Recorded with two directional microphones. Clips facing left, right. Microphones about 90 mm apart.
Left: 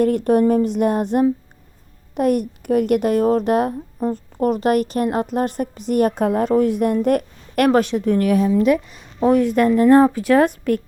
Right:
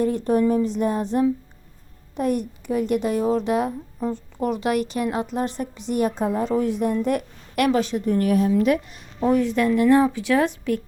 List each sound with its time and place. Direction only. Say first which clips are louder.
0.3 s a woman's voice: left 2 dB; 65° left (ahead or behind); by 7.9 s 50° left (ahead or behind)
7.9 s a woman's voice: left 3 dB; 90° left
9.2 s a woman's voice: left 4 dB; 55° left (ahead or behind)
9.6 s a woman's voice: left 5 dB; 40° left (ahead or behind)